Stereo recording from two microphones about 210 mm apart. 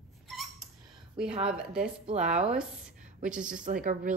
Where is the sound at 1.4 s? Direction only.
5° right (ahead or behind).